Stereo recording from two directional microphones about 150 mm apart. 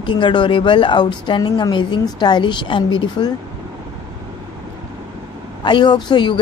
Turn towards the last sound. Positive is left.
turn(degrees=30)  # may be behind; listen again after turning